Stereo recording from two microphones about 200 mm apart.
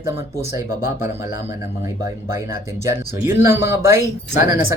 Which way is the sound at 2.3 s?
15° right (ahead or behind).